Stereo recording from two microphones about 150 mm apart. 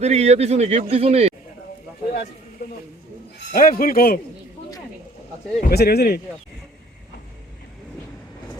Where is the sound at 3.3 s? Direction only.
70° left (ahead or behind).